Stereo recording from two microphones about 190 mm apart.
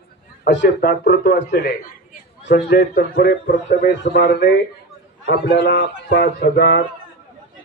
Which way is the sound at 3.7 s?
60° left (ahead or behind).